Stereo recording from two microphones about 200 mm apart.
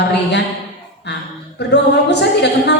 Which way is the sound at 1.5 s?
60° left (ahead or behind).